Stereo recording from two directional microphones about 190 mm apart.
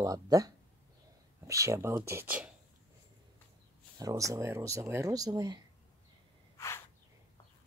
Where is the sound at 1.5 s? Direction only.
15° right (ahead or behind).